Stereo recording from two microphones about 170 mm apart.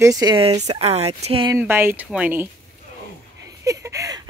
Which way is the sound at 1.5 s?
15° right (ahead or behind).